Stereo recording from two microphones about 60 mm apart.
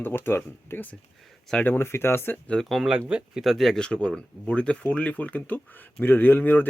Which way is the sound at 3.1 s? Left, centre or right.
Centre.